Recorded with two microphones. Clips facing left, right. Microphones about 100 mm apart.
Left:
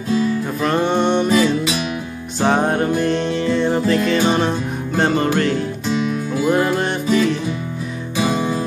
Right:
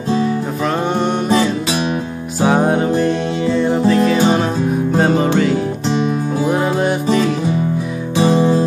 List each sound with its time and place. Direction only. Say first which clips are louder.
0.7 s music: left 1 dB; 5° right (ahead or behind)
1.3 s music: right 1 dB; 30° right (ahead or behind)
2.4 s music: right 3 dB; 5° right (ahead or behind)
5.9 s music: right 3 dB; 30° right (ahead or behind)
6.4 s music: even; 5° right (ahead or behind)
8.2 s music: right 6 dB; 30° right (ahead or behind)